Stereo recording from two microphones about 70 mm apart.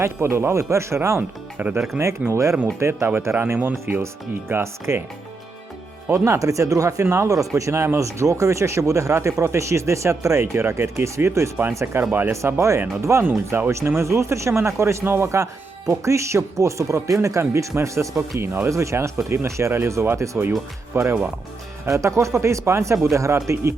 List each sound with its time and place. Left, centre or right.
0.0 s speech: right
1.5 s speech: right
2.0 s speech: right
3.3 s speech: right
6.1 s speech: right
18.3 s speech: right
18.7 s speech: right